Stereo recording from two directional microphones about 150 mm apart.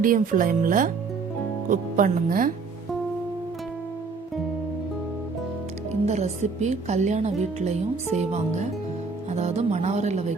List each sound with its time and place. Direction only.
0.0 s speech: 65° right (ahead or behind)
6.1 s a woman's voice: 45° right (ahead or behind)